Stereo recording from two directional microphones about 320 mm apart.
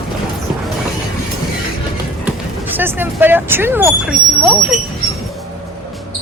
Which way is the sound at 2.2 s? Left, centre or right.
Centre.